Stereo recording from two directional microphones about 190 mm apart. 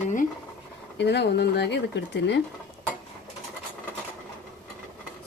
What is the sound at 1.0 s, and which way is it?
Speech, 65° left (ahead or behind).